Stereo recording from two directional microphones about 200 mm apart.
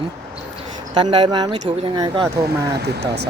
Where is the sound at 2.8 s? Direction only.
55° right (ahead or behind).